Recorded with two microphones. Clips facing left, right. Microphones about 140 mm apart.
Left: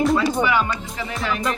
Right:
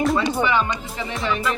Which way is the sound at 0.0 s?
Centre (ahead or behind).